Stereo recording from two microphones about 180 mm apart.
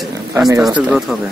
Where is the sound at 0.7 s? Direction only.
5° right (ahead or behind).